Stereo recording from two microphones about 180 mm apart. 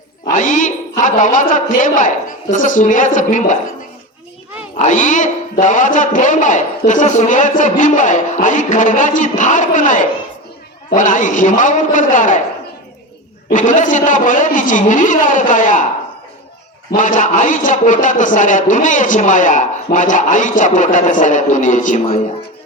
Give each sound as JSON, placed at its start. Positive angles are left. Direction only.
{"t": 0.3, "sound": "a man's voice", "side_deg": 45}
{"t": 4.8, "sound": "a man's voice", "side_deg": 45}
{"t": 13.5, "sound": "a man's voice", "side_deg": 45}
{"t": 16.9, "sound": "a man's voice", "side_deg": 45}